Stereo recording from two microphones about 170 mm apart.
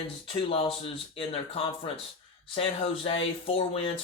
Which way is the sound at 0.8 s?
35° left (ahead or behind).